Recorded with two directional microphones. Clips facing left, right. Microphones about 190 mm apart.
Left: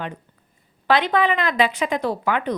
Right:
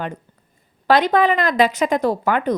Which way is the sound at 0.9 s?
40° right (ahead or behind).